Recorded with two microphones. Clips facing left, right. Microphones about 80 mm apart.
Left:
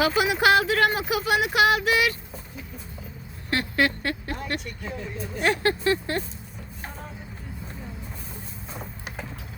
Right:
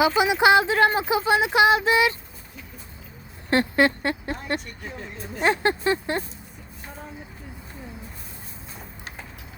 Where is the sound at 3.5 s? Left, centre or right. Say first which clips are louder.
Right 4 dB; right.